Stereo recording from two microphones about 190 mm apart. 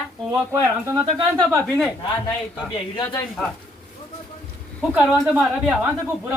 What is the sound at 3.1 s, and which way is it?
Speech, 5° left (ahead or behind).